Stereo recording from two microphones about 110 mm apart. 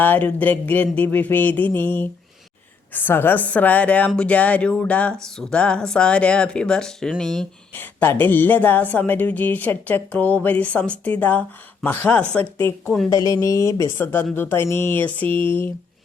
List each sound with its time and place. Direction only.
0.0 s speech: 15° left (ahead or behind)
7.8 s speech: 20° left (ahead or behind); by 13.1 s 5° left (ahead or behind)
13.1 s speech: 30° left (ahead or behind)